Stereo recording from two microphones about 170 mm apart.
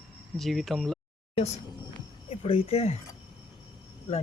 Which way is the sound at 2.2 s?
35° left (ahead or behind).